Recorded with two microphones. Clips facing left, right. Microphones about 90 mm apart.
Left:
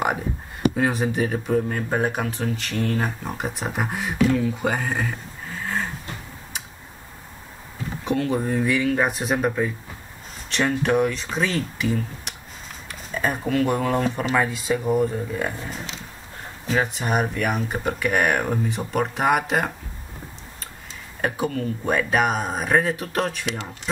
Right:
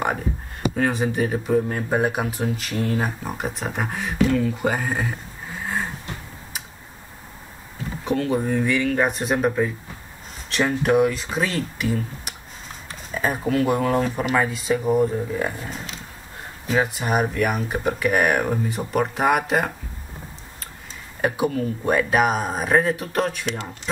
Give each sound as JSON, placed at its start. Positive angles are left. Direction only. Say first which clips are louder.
{"t": 0.7, "sound": "speech", "louder": "right 4 dB", "side_deg": 0}
{"t": 8.0, "sound": "speech", "louder": "right 1 dB", "side_deg": 0}
{"t": 10.7, "sound": "speech", "louder": "right 3 dB", "side_deg": -5}
{"t": 16.6, "sound": "speech", "louder": "right 1 dB", "side_deg": -5}
{"t": 21.2, "sound": "speech", "louder": "right 3 dB", "side_deg": -5}